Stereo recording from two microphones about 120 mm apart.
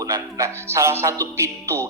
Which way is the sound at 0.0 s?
30° right (ahead or behind).